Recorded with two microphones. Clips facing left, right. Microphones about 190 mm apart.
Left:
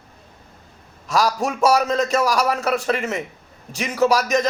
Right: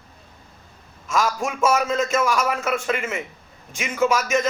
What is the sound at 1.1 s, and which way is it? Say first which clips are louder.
A man's voice: left 3 dB; 35° left (ahead or behind).